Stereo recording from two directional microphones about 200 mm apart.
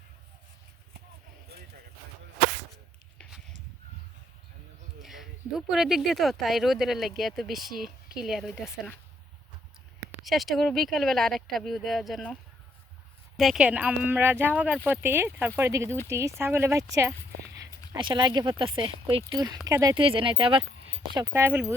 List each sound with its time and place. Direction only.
5.0 s speech: centre (ahead or behind)
10.2 s speech: centre (ahead or behind)